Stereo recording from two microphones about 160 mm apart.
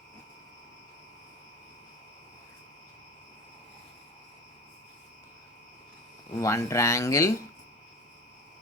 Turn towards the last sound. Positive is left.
turn(degrees=20)  # may be behind; listen again after turning